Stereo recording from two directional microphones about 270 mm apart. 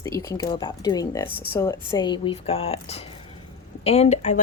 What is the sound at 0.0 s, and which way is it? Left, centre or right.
Speech, centre.